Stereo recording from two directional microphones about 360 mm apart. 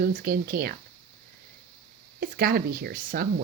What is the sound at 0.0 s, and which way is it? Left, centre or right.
Speech, right.